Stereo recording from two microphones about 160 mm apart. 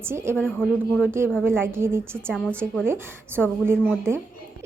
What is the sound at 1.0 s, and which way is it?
A woman's voice, 15° right (ahead or behind).